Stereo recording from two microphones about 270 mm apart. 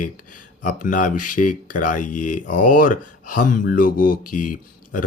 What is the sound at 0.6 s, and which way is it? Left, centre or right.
Speech, left.